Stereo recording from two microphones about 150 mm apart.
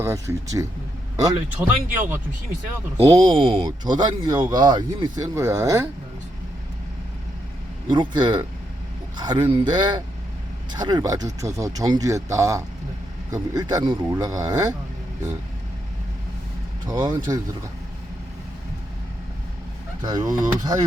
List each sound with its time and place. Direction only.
0.0 s speech: 15° right (ahead or behind)
3.0 s speech: 25° right (ahead or behind)
7.9 s speech: 30° right (ahead or behind)
16.8 s speech: 30° right (ahead or behind)
20.0 s speech: 30° right (ahead or behind)